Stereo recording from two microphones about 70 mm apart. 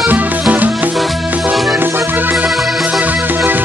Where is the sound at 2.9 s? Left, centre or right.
Right.